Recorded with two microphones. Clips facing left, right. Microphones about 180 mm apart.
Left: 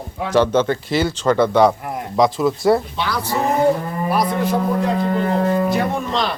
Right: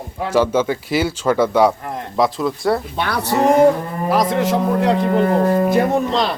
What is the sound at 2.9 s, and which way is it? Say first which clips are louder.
Speech: right 3 dB; 60° right (ahead or behind).